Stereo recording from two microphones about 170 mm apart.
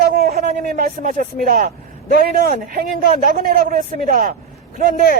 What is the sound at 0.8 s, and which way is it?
Speech, 55° right (ahead or behind).